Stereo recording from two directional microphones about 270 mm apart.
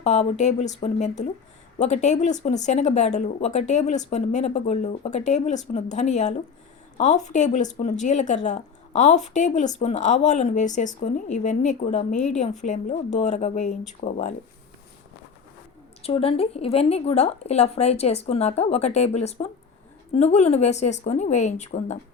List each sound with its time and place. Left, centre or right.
0.0 s speech: left
16.0 s speech: left